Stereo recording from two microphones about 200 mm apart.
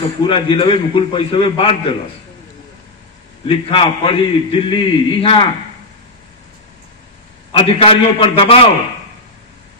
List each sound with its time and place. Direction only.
0.2 s a man's voice: 25° left (ahead or behind)
3.4 s a man's voice: 25° left (ahead or behind)
7.5 s a man's voice: 30° left (ahead or behind)